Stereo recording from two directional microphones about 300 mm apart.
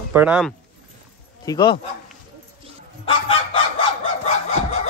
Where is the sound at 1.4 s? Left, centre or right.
Centre.